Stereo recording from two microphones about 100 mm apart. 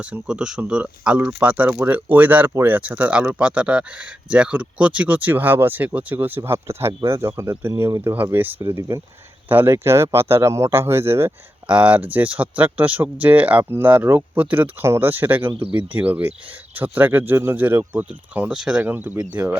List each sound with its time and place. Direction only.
0.0 s speech: 10° right (ahead or behind); by 8.1 s 30° right (ahead or behind)
8.1 s speech: 20° right (ahead or behind)
11.7 s speech: 15° right (ahead or behind)